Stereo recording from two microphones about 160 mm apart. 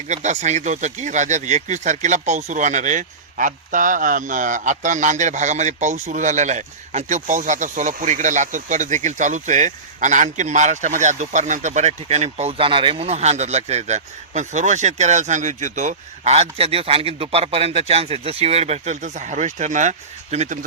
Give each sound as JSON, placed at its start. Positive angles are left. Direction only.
{"t": 0.1, "sound": "speech", "side_deg": -45}